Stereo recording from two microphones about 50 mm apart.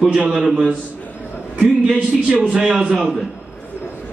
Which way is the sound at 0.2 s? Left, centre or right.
Centre.